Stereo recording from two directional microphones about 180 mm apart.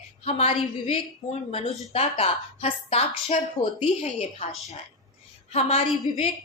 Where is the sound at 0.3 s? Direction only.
35° left (ahead or behind).